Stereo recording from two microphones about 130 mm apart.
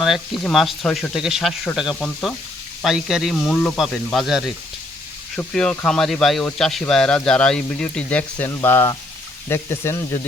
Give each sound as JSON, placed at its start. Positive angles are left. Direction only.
{"t": 0.0, "sound": "speech", "side_deg": 0}
{"t": 5.7, "sound": "speech", "side_deg": 5}